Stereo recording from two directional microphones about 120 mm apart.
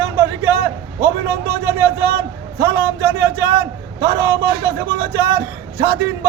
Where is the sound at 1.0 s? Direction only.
15° right (ahead or behind).